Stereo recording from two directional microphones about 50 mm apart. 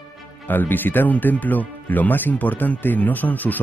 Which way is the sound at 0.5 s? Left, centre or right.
Left.